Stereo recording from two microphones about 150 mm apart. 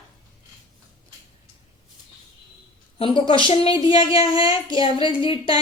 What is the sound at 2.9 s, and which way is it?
A woman's voice, 35° left (ahead or behind).